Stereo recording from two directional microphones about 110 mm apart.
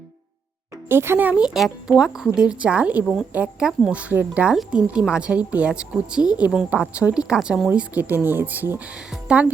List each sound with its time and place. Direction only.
0.9 s a woman's voice: 20° right (ahead or behind)